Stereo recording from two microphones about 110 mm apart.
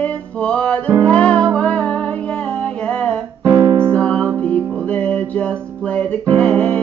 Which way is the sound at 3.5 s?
50° right (ahead or behind).